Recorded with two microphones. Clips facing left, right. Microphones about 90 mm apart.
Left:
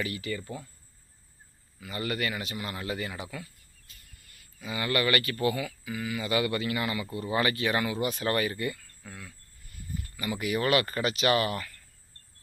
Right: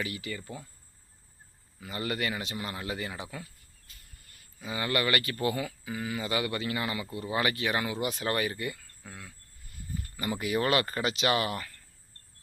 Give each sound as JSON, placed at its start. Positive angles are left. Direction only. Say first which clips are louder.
{"t": 0.0, "sound": "speech", "louder": "left 3 dB", "side_deg": -20}
{"t": 1.8, "sound": "speech", "louder": "left 1 dB", "side_deg": -25}
{"t": 4.6, "sound": "speech", "louder": "left 1 dB", "side_deg": -25}
{"t": 10.2, "sound": "speech", "louder": "even", "side_deg": -30}